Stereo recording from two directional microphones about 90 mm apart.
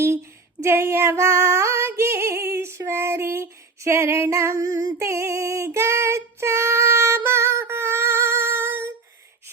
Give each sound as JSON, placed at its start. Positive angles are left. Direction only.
{"t": 0.6, "sound": "female singing", "side_deg": -30}